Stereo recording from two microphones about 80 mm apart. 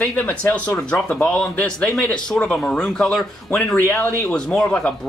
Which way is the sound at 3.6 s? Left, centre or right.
Centre.